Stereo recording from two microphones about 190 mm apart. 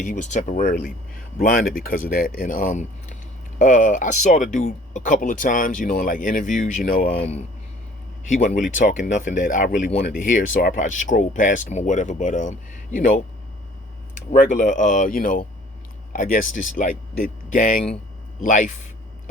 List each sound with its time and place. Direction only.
0.0 s speech: 40° left (ahead or behind)
8.3 s speech: 45° left (ahead or behind)
14.3 s speech: 45° left (ahead or behind)